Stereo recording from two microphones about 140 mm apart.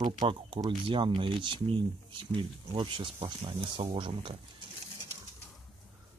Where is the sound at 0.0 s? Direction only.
35° right (ahead or behind).